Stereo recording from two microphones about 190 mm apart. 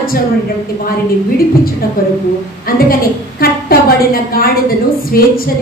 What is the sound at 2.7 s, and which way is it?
A woman's voice, 50° left (ahead or behind).